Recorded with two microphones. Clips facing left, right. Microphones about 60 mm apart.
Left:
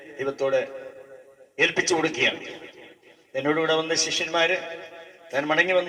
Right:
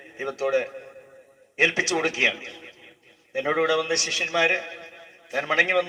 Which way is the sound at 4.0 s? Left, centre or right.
Right.